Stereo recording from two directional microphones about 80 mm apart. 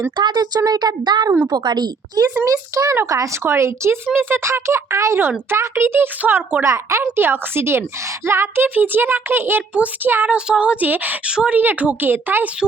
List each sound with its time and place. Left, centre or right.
0.2 s speech: right
0.6 s a woman's voice: right
2.4 s speech: right
3.4 s a child's voice: right
10.3 s a child's voice: centre